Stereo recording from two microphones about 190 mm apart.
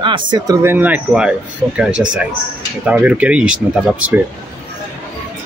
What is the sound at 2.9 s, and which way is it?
Speech, 5° right (ahead or behind).